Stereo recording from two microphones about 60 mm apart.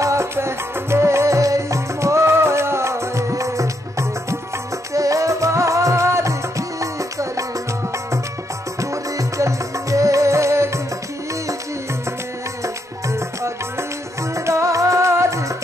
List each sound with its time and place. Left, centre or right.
0.0 s music: right
8.9 s music: right
12.6 s music: right